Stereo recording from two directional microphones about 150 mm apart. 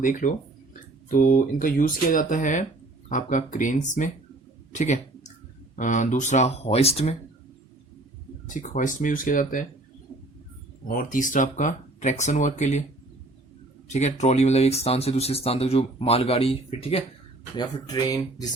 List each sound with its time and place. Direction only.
0.0 s speech: 60° left (ahead or behind)
4.7 s a sound: 50° left (ahead or behind)
5.7 s speech: 55° left (ahead or behind)
8.4 s speech: 60° left (ahead or behind)
10.8 s speech: 65° left (ahead or behind); by 12.8 s 50° left (ahead or behind)
13.9 s speech: 50° left (ahead or behind)
17.6 s speech: 30° left (ahead or behind)